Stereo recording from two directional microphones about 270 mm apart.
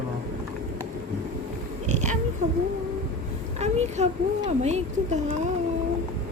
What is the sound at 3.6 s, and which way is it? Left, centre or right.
A child's voice, right.